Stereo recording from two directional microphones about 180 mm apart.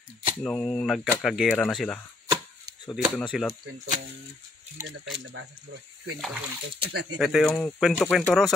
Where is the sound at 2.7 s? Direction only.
65° right (ahead or behind).